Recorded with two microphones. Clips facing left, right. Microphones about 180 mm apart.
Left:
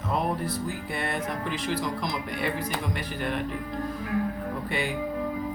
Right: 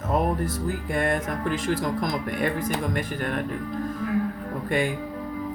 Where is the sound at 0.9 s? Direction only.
45° right (ahead or behind).